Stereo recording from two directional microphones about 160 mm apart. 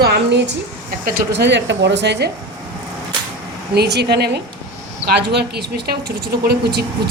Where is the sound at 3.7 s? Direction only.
90° right.